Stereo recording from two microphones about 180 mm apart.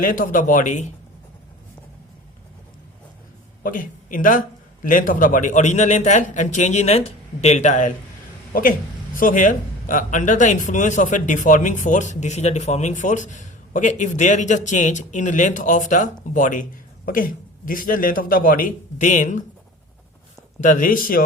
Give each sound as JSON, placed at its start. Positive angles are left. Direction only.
{"t": 0.0, "sound": "speech", "side_deg": 50}
{"t": 3.6, "sound": "speech", "side_deg": 50}
{"t": 9.1, "sound": "speech", "side_deg": 45}
{"t": 20.6, "sound": "speech", "side_deg": 45}